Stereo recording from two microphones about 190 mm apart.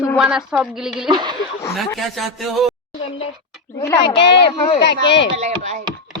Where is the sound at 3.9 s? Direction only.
25° left (ahead or behind).